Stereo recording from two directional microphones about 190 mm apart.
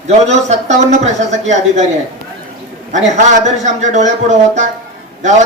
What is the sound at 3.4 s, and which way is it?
A man's voice, 40° right (ahead or behind).